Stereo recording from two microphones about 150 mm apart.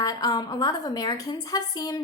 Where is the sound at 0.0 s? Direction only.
25° left (ahead or behind).